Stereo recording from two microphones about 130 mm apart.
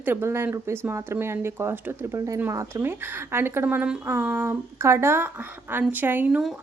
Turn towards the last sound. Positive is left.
turn(degrees=-5)  # may be behind; listen again after turning